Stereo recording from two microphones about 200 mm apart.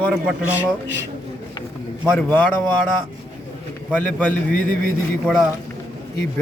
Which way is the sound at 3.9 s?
5° left (ahead or behind).